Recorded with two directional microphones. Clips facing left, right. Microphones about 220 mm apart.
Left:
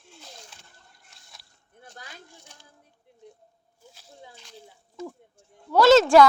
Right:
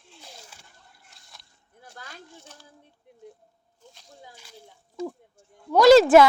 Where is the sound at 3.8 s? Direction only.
5° left (ahead or behind).